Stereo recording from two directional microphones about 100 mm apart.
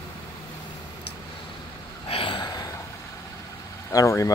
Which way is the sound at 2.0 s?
65° left (ahead or behind).